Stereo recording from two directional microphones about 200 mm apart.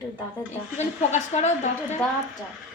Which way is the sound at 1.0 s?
35° left (ahead or behind).